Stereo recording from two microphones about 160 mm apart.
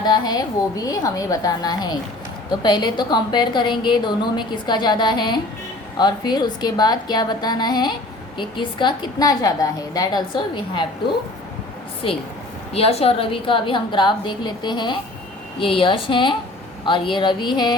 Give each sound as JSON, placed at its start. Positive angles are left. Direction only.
{"t": 0.0, "sound": "a woman's voice", "side_deg": 25}
{"t": 12.7, "sound": "a woman's voice", "side_deg": 40}